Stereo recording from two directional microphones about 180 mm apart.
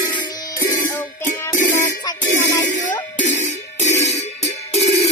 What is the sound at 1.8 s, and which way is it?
Music, 20° left (ahead or behind).